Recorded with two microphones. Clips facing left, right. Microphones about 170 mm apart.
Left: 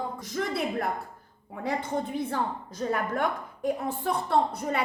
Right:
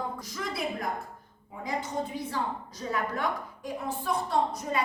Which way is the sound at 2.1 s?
55° left (ahead or behind).